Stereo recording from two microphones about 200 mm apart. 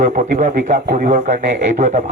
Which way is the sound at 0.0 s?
40° right (ahead or behind).